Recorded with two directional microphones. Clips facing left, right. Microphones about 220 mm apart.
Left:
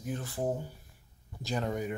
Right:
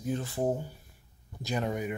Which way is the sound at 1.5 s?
10° right (ahead or behind).